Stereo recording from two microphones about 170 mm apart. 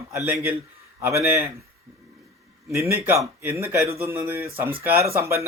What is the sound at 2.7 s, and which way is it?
A man's voice, 15° right (ahead or behind).